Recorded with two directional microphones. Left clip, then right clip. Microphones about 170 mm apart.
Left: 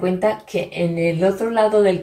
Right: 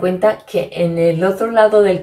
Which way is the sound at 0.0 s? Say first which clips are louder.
Right 5 dB; 20° right (ahead or behind).